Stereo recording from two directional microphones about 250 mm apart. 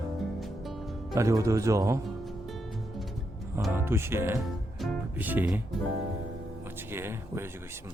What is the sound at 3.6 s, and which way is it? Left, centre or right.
Music, centre.